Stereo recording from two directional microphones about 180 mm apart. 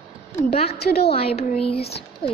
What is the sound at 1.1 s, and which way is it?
Speech, 30° left (ahead or behind).